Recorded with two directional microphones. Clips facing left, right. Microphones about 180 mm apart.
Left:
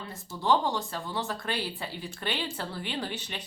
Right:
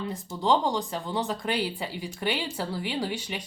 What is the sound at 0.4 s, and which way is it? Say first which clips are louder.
A woman's voice: right 2 dB; 15° right (ahead or behind).